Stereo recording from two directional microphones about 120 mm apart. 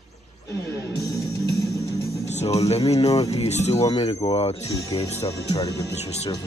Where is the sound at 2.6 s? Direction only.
60° left (ahead or behind).